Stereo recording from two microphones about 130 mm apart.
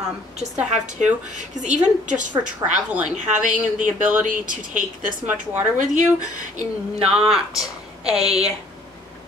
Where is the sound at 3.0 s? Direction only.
75° right (ahead or behind).